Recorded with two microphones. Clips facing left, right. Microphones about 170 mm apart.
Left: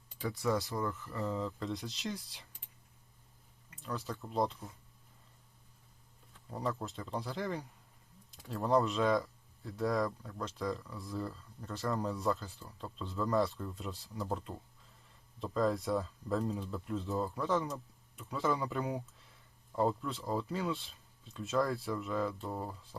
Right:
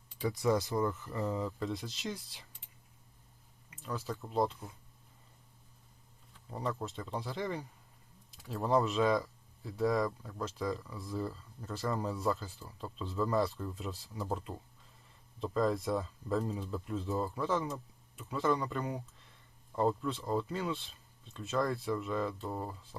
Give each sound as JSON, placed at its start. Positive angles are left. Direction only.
{"t": 0.3, "sound": "speech", "side_deg": -15}
{"t": 1.5, "sound": "speech", "side_deg": -5}
{"t": 3.8, "sound": "speech", "side_deg": 0}
{"t": 6.5, "sound": "speech", "side_deg": 0}